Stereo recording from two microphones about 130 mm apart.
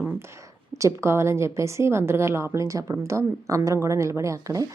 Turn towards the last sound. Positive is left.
turn(degrees=-25)  # may be behind; listen again after turning